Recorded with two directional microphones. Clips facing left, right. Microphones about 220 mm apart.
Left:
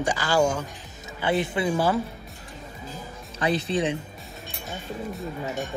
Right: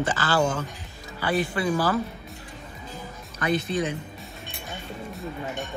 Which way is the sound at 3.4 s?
30° left (ahead or behind).